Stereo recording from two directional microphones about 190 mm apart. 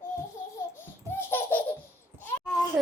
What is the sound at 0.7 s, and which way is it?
Laughter, 10° left (ahead or behind).